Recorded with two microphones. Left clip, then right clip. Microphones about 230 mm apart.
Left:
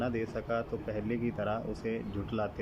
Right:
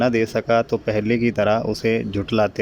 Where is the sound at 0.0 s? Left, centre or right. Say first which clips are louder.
Right 15 dB; right.